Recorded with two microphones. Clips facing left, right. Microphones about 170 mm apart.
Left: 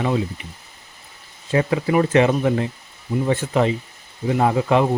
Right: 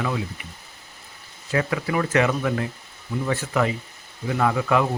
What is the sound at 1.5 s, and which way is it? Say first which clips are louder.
Speech: left 5 dB; 25° left (ahead or behind).